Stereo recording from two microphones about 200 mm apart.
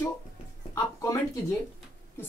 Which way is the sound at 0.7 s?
15° left (ahead or behind).